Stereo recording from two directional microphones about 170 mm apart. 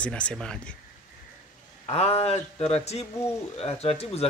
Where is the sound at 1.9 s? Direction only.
35° left (ahead or behind).